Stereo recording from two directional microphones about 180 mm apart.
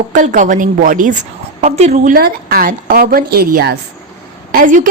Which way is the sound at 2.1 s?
55° right (ahead or behind).